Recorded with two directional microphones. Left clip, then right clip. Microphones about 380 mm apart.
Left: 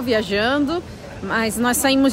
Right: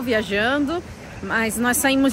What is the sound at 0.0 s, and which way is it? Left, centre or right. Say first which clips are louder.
Speech: left 1 dB; centre.